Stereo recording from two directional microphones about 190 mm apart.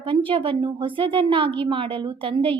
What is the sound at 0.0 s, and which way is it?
A woman's voice, 25° right (ahead or behind).